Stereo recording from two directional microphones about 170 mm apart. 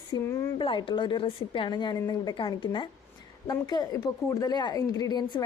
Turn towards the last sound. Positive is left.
turn(degrees=25)  # may be behind; listen again after turning